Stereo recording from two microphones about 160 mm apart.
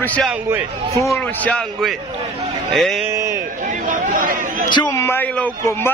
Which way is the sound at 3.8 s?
60° right (ahead or behind).